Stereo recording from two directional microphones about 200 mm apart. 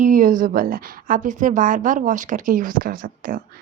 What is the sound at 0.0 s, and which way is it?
A woman's voice, 40° right (ahead or behind).